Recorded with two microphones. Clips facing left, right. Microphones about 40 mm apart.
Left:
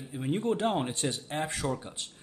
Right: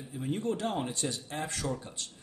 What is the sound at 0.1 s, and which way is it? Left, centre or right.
Speech, left.